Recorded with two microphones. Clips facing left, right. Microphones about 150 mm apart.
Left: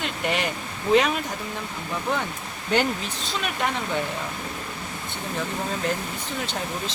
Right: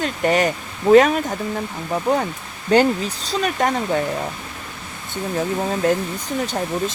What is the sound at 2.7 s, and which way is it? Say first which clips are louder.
Speech: right 8 dB; 40° right (ahead or behind).